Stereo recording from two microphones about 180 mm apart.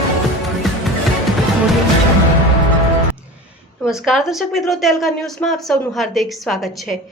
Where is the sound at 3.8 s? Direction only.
5° right (ahead or behind).